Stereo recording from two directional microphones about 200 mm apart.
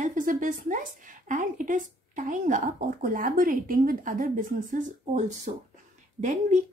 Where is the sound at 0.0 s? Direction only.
40° right (ahead or behind).